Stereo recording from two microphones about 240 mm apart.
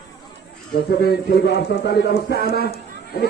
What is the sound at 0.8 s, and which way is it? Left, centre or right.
Speech, left.